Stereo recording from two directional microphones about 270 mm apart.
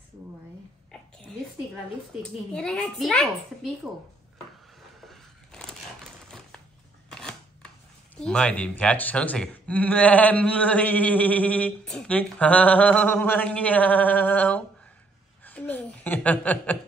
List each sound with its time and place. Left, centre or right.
2.5 s speech: centre
5.0 s vehicle: centre
7.1 s camera: centre
8.2 s a woman's voice: centre